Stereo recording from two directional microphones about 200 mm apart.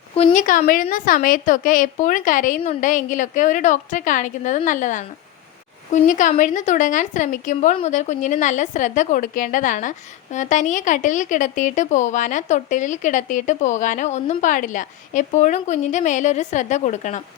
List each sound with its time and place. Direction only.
0.3 s speech: 40° left (ahead or behind)